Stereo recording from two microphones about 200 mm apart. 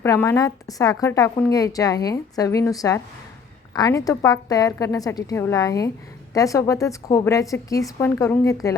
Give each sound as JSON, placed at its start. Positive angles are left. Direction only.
{"t": 0.0, "sound": "a woman's voice", "side_deg": 15}